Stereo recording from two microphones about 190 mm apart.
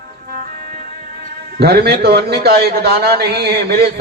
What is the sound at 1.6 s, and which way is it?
A man's voice, 55° right (ahead or behind).